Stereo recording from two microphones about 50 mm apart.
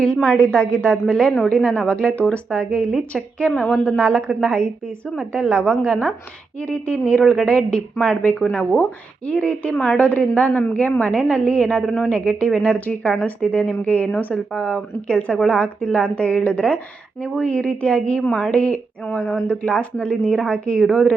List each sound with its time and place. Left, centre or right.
0.0 s a woman's voice: centre; by 14.4 s left
15.0 s a woman's voice: left